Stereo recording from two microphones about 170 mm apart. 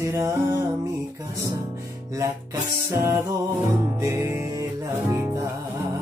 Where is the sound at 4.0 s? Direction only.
15° right (ahead or behind).